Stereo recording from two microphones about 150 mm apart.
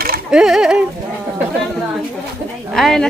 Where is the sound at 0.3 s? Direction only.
5° right (ahead or behind).